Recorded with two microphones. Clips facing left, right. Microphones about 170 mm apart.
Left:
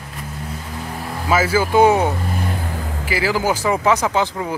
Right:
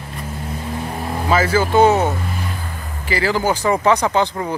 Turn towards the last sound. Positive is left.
turn(degrees=5)  # may be behind; listen again after turning